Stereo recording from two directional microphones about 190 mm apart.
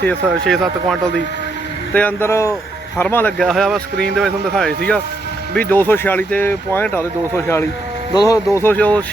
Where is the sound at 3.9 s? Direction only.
55° right (ahead or behind).